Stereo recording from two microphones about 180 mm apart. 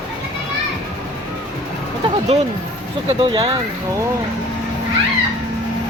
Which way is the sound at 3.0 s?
30° right (ahead or behind).